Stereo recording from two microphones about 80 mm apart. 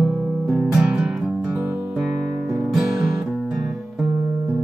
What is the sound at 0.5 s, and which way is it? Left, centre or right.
Music, centre.